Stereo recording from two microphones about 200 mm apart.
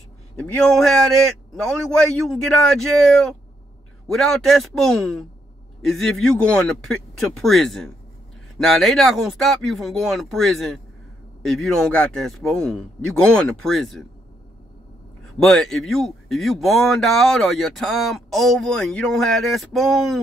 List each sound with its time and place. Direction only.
0.4 s speech: 5° left (ahead or behind)
15.3 s speech: centre (ahead or behind)